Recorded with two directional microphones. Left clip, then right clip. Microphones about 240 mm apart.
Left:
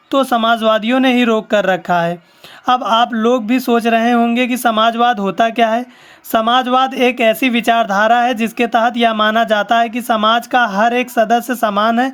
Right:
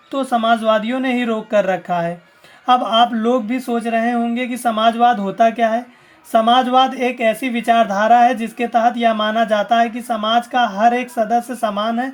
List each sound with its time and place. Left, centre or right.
0.1 s speech: left